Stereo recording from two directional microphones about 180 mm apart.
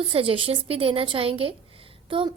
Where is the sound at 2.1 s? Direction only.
30° right (ahead or behind).